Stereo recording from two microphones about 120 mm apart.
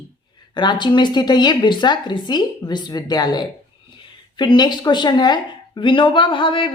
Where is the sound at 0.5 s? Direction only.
40° left (ahead or behind).